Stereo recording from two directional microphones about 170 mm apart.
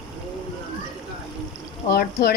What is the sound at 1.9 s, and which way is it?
Speech, 65° left (ahead or behind).